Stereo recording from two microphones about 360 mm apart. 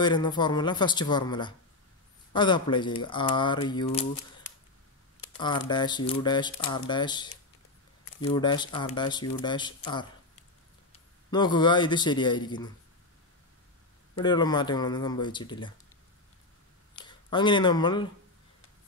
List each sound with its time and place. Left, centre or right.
0.0 s speech: centre
5.7 s a man's voice: centre
14.1 s speech: centre
16.9 s speech: centre